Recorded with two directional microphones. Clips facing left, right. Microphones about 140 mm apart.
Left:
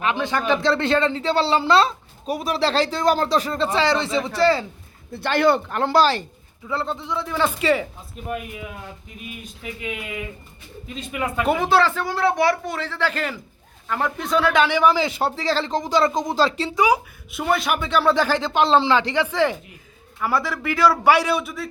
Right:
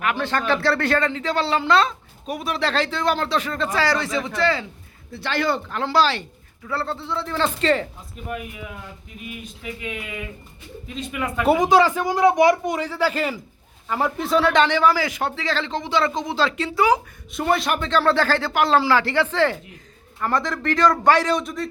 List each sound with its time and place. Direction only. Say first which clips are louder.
0.0 s speech: left 1 dB; 20° left (ahead or behind); by 4.6 s 35° left (ahead or behind)
5.1 s speech: left 5 dB; 50° left (ahead or behind)
6.7 s speech: left 1 dB; 20° left (ahead or behind)
11.4 s speech: right 3 dB; 15° right (ahead or behind); by 16.7 s 35° left (ahead or behind)
16.7 s speech: right 1 dB; 15° left (ahead or behind)
17.3 s speech: even; centre (ahead or behind)